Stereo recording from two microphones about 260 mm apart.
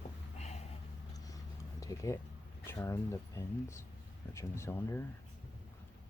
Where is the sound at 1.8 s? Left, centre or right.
Centre.